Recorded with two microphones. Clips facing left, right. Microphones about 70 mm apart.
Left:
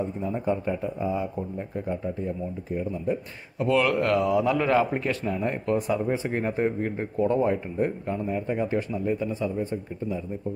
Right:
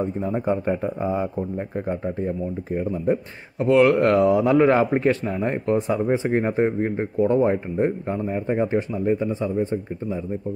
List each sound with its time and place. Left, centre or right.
0.0 s a man's voice: right
3.5 s a man's voice: right